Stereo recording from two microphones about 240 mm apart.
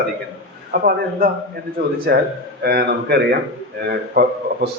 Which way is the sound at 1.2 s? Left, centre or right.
Right.